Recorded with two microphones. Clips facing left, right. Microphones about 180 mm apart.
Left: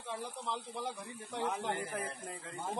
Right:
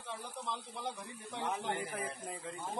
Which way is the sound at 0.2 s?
10° left (ahead or behind).